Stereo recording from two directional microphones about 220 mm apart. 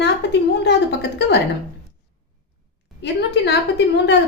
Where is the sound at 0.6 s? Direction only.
50° left (ahead or behind).